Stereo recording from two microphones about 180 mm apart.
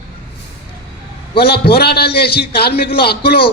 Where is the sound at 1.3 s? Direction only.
60° left (ahead or behind).